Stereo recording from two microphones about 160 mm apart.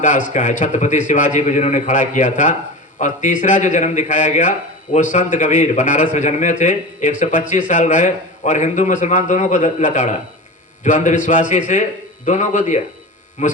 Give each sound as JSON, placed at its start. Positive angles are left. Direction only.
{"t": 0.0, "sound": "speech", "side_deg": 50}